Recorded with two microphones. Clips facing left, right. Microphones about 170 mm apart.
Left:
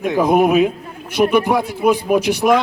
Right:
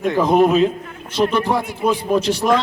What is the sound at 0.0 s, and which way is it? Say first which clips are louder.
A man's voice: even; 10° left (ahead or behind).